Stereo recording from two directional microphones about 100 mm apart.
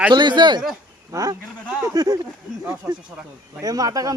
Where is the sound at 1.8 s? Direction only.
40° right (ahead or behind).